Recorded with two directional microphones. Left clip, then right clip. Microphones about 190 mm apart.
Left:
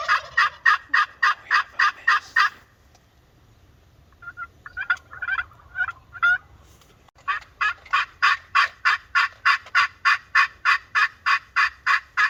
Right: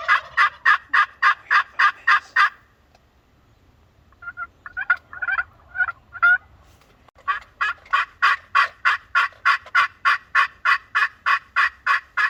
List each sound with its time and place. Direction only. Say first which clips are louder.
0.3 s fowl: even; 35° right (ahead or behind)
4.6 s gobble: right 3 dB; 35° right (ahead or behind)
7.3 s fowl: right 1 dB; 40° right (ahead or behind)